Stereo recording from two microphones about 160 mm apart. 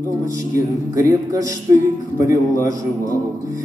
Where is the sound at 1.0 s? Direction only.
20° right (ahead or behind).